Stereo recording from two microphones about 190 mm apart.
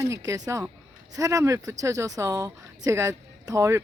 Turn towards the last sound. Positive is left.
turn(degrees=-15)  # may be behind; listen again after turning